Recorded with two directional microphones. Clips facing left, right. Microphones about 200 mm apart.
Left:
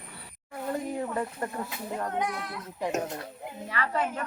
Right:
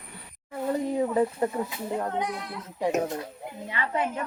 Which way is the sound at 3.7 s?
20° right (ahead or behind).